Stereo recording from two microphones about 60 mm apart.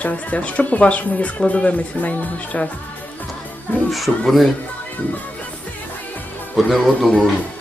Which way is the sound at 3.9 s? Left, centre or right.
Centre.